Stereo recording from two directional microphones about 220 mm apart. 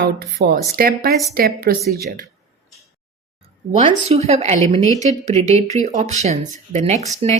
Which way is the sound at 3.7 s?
30° right (ahead or behind).